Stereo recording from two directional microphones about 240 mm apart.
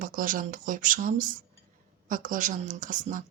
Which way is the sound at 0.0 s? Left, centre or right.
Right.